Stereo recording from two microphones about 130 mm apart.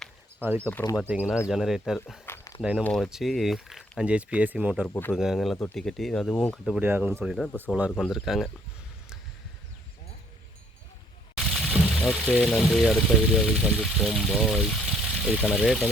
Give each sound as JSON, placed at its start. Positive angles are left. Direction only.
{"t": 0.4, "sound": "speech", "side_deg": -15}
{"t": 2.2, "sound": "a sound", "side_deg": 20}
{"t": 2.6, "sound": "speech", "side_deg": -5}
{"t": 6.7, "sound": "speech", "side_deg": -15}
{"t": 7.3, "sound": "speech", "side_deg": 0}
{"t": 11.3, "sound": "speech", "side_deg": 0}